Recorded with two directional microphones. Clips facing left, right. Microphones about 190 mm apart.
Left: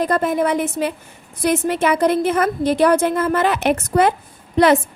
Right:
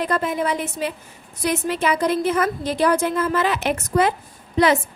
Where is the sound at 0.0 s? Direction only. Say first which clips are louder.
Left 4 dB; 50° left (ahead or behind).